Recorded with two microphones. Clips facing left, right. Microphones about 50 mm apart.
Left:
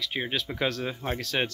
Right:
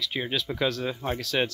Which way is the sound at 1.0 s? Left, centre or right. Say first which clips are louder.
Right 1 dB; centre.